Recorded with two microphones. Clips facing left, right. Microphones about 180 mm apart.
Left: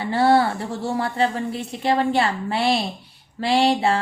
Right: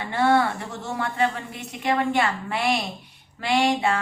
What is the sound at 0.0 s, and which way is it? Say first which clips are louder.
Speech: left 3 dB; 35° left (ahead or behind).